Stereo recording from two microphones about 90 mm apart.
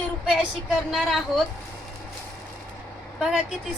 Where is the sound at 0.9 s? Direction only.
Centre (ahead or behind).